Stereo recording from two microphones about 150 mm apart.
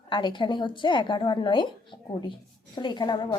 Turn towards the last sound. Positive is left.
turn(degrees=30)  # may be behind; listen again after turning